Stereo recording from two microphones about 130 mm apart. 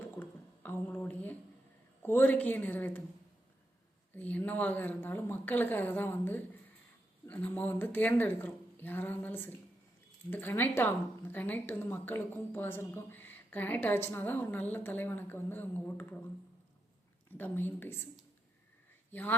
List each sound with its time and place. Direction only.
0.2 s a sound: 15° left (ahead or behind)
2.0 s speech: 15° left (ahead or behind)
4.1 s speech: 10° left (ahead or behind)
17.3 s speech: 15° left (ahead or behind)